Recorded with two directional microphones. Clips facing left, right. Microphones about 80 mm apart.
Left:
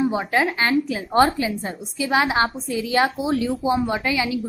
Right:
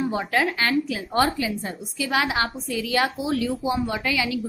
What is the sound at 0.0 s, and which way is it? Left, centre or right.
A woman's voice, centre.